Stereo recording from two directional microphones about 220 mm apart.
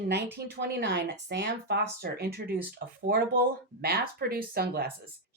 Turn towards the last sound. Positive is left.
turn(degrees=-45)  # may be behind; listen again after turning